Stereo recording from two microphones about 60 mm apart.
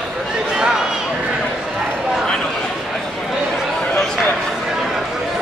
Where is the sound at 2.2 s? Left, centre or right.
Centre.